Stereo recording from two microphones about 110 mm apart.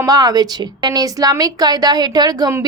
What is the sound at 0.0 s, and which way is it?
Speech, 35° right (ahead or behind).